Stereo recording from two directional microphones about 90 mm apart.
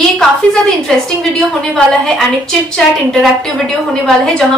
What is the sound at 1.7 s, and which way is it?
Speech, 5° left (ahead or behind).